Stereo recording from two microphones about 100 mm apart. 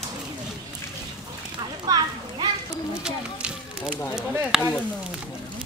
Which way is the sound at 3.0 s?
10° right (ahead or behind).